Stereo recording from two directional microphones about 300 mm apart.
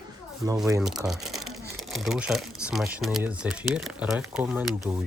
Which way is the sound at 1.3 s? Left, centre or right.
Right.